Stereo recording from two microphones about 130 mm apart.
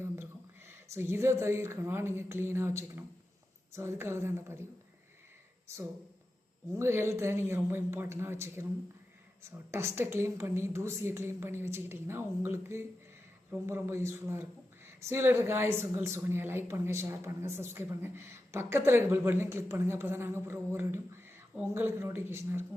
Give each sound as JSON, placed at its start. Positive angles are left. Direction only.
{"t": 0.7, "sound": "speech", "side_deg": -20}
{"t": 6.7, "sound": "speech", "side_deg": -20}
{"t": 9.7, "sound": "speech", "side_deg": -20}